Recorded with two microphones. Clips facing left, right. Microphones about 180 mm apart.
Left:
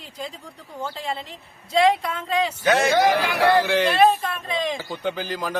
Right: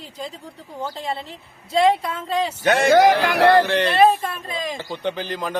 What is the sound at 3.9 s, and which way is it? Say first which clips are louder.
Speech: right 2 dB; 5° right (ahead or behind).